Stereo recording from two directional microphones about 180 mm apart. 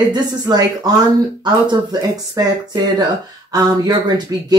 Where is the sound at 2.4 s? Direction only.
20° right (ahead or behind).